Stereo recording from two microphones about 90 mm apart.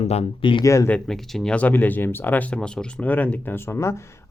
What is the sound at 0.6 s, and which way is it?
Speech, 35° left (ahead or behind).